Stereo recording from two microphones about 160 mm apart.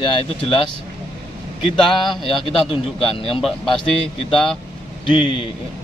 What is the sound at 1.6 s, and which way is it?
Speech, 30° left (ahead or behind).